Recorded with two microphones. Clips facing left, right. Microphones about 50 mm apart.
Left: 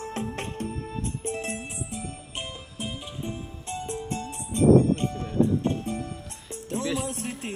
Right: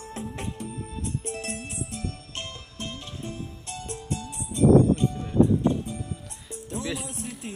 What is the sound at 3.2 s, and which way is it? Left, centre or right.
Music, left.